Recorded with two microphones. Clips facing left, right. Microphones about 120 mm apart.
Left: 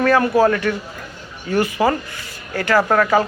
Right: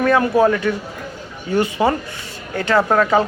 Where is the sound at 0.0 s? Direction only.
15° right (ahead or behind).